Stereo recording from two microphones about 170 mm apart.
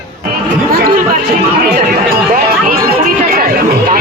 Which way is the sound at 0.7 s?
55° right (ahead or behind).